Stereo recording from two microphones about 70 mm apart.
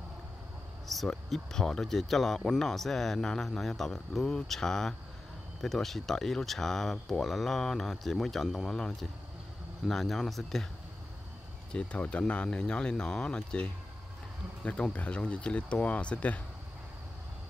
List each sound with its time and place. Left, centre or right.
0.8 s speech: centre
11.7 s speech: centre